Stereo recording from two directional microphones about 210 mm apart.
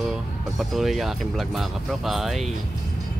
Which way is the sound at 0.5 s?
Centre (ahead or behind).